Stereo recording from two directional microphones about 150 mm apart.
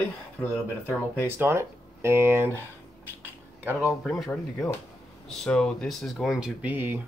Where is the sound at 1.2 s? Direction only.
15° right (ahead or behind).